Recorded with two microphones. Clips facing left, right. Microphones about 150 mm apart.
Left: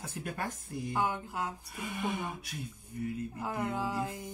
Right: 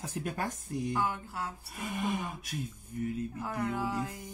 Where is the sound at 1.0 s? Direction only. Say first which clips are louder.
Left 1 dB; 20° left (ahead or behind).